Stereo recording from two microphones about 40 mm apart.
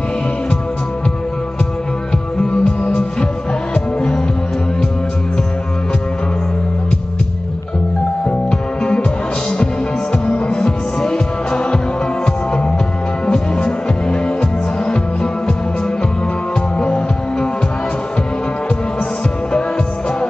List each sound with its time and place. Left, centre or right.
2.5 s music: centre
8.3 s music: left
10.1 s music: left
13.3 s music: centre
16.7 s music: left